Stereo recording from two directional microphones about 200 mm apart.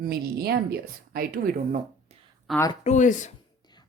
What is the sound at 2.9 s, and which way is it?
Speech, 40° left (ahead or behind).